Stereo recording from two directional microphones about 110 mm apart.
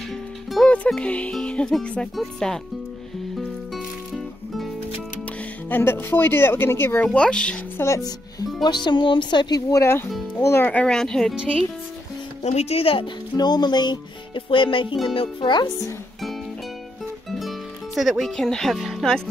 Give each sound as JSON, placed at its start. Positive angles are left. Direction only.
{"t": 0.5, "sound": "speech", "side_deg": 5}
{"t": 3.3, "sound": "music", "side_deg": 0}
{"t": 5.7, "sound": "speech", "side_deg": 20}
{"t": 7.2, "sound": "speech", "side_deg": 10}
{"t": 7.8, "sound": "speech", "side_deg": 30}
{"t": 8.6, "sound": "speech", "side_deg": 45}
{"t": 10.3, "sound": "speech", "side_deg": 20}
{"t": 10.7, "sound": "speech", "side_deg": 10}
{"t": 12.4, "sound": "speech", "side_deg": 75}
{"t": 13.4, "sound": "speech", "side_deg": 40}
{"t": 17.3, "sound": "music", "side_deg": 0}